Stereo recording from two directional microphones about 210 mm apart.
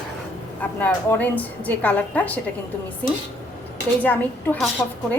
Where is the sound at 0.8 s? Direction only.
10° left (ahead or behind).